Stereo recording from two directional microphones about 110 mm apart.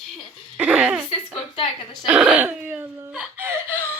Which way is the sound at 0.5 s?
15° right (ahead or behind).